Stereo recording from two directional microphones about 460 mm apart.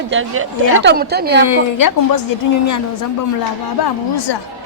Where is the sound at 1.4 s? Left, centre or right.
Left.